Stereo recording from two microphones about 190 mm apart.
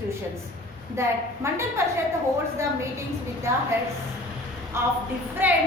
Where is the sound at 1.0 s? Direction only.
15° right (ahead or behind).